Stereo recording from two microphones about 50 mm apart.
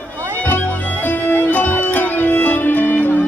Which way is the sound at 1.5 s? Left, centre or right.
Left.